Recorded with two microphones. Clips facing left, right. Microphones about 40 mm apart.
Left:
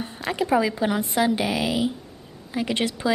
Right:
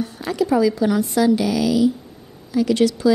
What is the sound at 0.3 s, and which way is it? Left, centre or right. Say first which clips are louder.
A woman's voice: right 4 dB; left.